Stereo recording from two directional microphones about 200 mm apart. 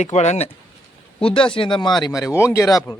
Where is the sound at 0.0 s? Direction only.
35° left (ahead or behind); by 3.0 s 20° left (ahead or behind).